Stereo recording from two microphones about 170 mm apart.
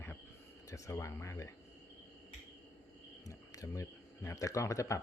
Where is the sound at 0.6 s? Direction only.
20° left (ahead or behind).